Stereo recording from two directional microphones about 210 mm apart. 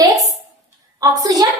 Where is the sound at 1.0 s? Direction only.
20° right (ahead or behind).